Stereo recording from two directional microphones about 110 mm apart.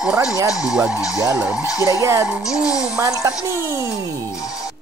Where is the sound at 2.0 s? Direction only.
25° right (ahead or behind).